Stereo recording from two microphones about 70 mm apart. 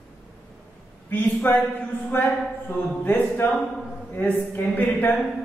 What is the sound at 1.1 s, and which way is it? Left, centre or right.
Speech, left.